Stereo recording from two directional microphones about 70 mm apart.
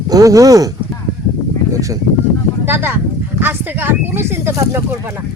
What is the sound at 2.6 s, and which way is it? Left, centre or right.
Speech, right.